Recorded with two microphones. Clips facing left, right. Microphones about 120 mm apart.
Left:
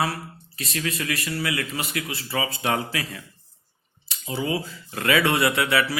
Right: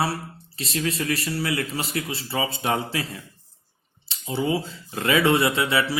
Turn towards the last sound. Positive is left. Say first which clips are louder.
# even
turn(degrees=-25)  # may be behind; listen again after turning